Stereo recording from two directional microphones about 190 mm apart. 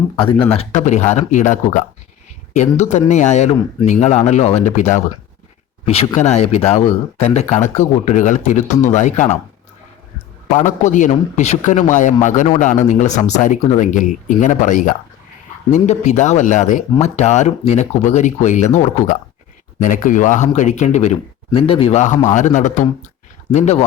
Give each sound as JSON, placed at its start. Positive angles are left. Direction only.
{"t": 0.2, "sound": "a man's voice", "side_deg": 25}
{"t": 10.5, "sound": "a man's voice", "side_deg": 40}